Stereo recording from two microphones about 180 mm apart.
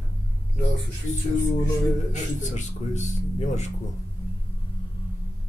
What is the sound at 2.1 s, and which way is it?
Speech, 40° left (ahead or behind).